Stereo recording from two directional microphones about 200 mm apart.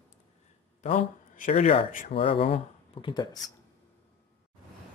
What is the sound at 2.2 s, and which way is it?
Speech, 30° left (ahead or behind).